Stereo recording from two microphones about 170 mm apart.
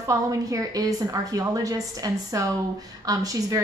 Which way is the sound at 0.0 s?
20° right (ahead or behind).